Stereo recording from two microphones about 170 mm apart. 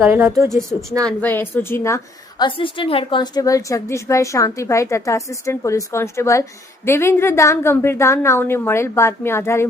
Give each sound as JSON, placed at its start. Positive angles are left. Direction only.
{"t": 0.0, "sound": "a woman's voice", "side_deg": -15}
{"t": 0.7, "sound": "a woman's voice", "side_deg": 0}
{"t": 2.4, "sound": "a woman's voice", "side_deg": 30}